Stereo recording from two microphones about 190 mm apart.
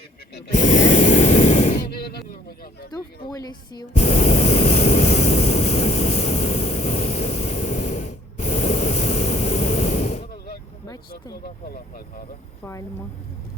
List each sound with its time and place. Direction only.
0.5 s a sound: 40° left (ahead or behind)
3.2 s a woman's voice: 20° left (ahead or behind)
3.9 s vehicle: 35° left (ahead or behind)
11.4 s speech: 50° left (ahead or behind)